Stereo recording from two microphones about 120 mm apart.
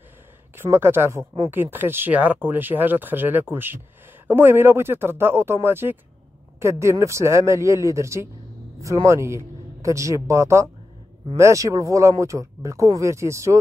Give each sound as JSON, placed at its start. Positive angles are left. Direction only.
{"t": 0.6, "sound": "a man's voice", "side_deg": -20}